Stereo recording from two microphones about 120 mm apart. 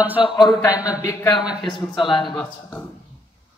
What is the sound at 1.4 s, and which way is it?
Speech, 5° right (ahead or behind).